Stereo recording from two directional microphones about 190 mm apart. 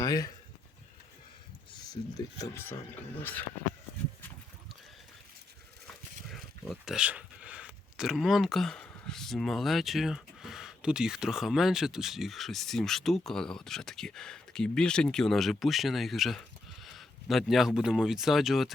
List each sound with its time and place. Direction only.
0.0 s a sound: 20° left (ahead or behind)
1.9 s speech: 20° left (ahead or behind)
6.2 s speech: centre (ahead or behind)